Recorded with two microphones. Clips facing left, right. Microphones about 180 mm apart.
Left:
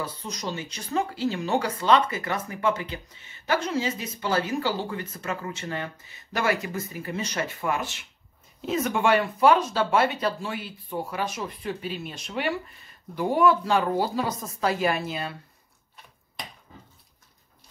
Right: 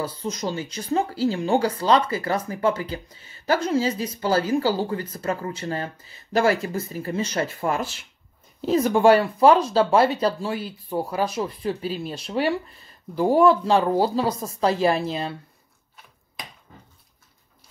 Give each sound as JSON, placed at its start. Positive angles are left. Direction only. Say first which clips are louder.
{"t": 0.0, "sound": "speech", "louder": "right 5 dB", "side_deg": -30}
{"t": 16.4, "sound": "finger snapping", "louder": "even", "side_deg": 0}